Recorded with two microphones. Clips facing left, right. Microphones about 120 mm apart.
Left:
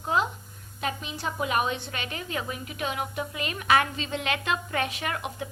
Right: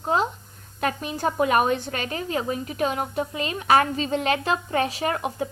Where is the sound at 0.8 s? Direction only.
50° right (ahead or behind).